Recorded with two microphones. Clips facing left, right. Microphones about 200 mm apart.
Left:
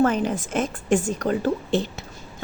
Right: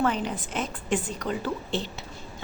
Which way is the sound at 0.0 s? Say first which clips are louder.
Left 6 dB; 45° left (ahead or behind).